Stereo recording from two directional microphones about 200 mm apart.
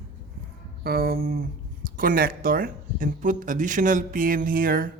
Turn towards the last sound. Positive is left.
turn(degrees=-45)  # may be behind; listen again after turning